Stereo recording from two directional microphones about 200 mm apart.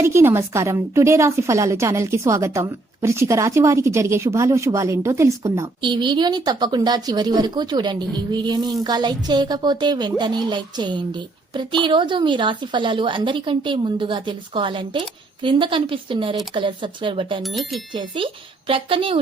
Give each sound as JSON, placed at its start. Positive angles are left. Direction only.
{"t": 0.0, "sound": "a woman's voice", "side_deg": -15}
{"t": 17.4, "sound": "speech", "side_deg": 0}
{"t": 17.9, "sound": "a woman's voice", "side_deg": -25}